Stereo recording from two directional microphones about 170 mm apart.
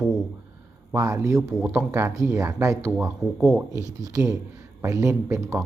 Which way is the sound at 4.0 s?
20° right (ahead or behind).